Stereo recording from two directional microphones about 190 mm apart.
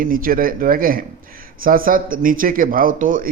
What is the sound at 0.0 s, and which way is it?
A man's voice, 50° right (ahead or behind).